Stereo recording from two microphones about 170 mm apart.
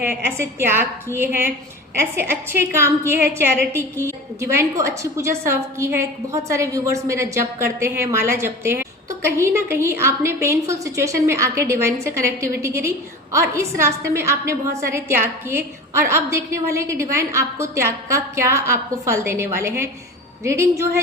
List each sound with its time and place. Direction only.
0.3 s a woman's voice: 15° right (ahead or behind)